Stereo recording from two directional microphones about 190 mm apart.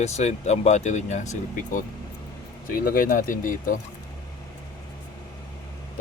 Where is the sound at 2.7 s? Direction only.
50° left (ahead or behind).